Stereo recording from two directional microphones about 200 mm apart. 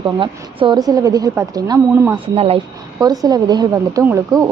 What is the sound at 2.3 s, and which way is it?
Speech, 30° right (ahead or behind).